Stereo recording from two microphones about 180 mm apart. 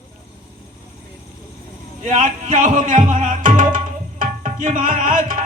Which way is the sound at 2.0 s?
45° right (ahead or behind).